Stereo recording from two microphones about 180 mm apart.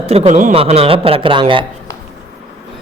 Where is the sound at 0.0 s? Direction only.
35° right (ahead or behind).